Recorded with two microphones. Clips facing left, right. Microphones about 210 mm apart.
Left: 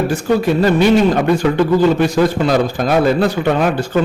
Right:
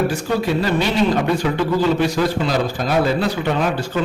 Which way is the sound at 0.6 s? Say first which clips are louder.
Left 7 dB; 50° left (ahead or behind).